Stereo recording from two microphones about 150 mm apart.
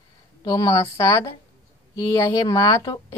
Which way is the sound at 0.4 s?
25° left (ahead or behind).